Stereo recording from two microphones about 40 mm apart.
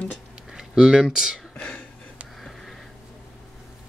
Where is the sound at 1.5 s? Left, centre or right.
Left.